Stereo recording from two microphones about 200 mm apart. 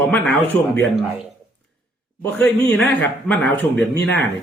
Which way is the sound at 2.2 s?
10° left (ahead or behind).